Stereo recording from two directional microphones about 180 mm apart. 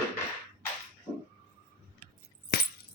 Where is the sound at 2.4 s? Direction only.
60° left (ahead or behind).